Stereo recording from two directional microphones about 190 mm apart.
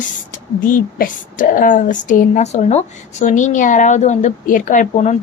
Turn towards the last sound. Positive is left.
turn(degrees=35)  # may be behind; listen again after turning